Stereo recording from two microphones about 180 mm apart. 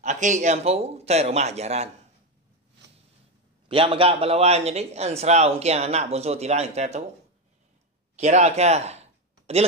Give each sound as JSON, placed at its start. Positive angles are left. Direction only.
{"t": 0.0, "sound": "a man's voice", "side_deg": -40}
{"t": 3.6, "sound": "a man's voice", "side_deg": -30}
{"t": 8.2, "sound": "speech", "side_deg": -40}